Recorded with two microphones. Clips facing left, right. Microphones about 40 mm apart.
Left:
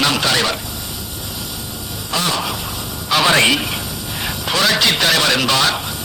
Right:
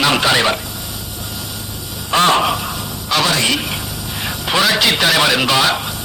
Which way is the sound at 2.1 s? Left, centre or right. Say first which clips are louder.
Right 7 dB; right.